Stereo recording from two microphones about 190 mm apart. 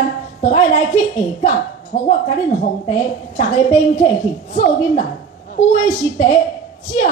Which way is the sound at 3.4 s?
35° left (ahead or behind).